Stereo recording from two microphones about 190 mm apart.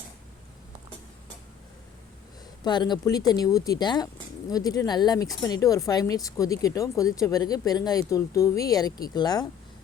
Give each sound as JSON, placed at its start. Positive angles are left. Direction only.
{"t": 2.6, "sound": "speech", "side_deg": 25}